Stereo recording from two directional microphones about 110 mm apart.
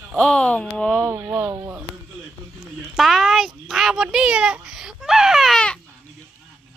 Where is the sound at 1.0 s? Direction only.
25° right (ahead or behind).